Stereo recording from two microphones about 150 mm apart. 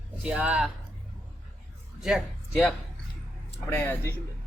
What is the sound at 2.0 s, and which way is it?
Speech, 5° right (ahead or behind).